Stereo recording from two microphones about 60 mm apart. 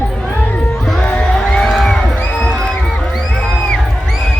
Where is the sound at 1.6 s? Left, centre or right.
Centre.